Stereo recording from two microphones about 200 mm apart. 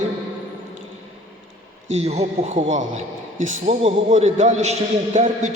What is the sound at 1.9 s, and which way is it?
A man's voice, 35° right (ahead or behind).